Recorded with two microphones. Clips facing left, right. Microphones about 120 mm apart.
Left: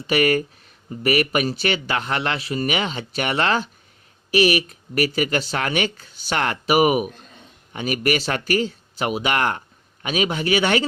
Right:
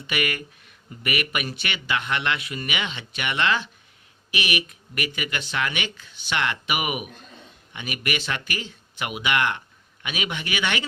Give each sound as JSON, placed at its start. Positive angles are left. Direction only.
{"t": 0.1, "sound": "speech", "side_deg": 35}